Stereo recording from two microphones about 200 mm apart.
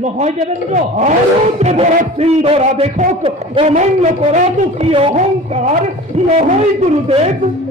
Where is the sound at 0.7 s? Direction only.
35° right (ahead or behind).